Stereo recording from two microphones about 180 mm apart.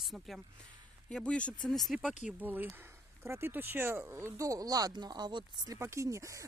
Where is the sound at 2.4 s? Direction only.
10° right (ahead or behind).